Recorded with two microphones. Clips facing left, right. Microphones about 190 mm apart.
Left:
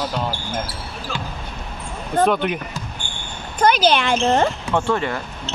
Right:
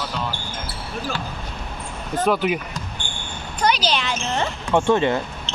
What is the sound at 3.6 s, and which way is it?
Speech, 50° left (ahead or behind).